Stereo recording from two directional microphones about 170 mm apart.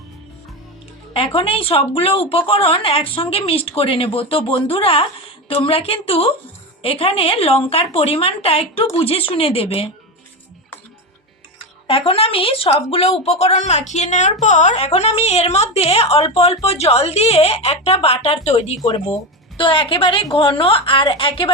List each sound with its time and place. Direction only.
1.1 s speech: 35° left (ahead or behind)
11.9 s speech: 35° left (ahead or behind)
18.8 s speech: 20° left (ahead or behind)